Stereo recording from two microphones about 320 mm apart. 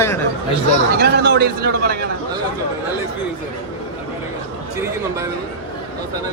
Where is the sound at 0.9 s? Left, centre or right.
Right.